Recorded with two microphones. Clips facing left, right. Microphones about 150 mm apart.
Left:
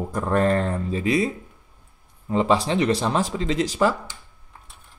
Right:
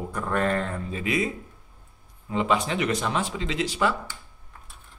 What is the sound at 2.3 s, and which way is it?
Speech, 35° left (ahead or behind).